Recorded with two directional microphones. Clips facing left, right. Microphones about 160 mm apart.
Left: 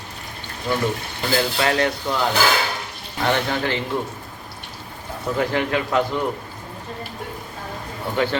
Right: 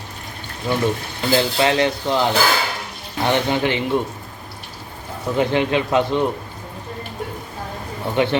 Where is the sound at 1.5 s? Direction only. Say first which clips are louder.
Right 3 dB; 20° right (ahead or behind).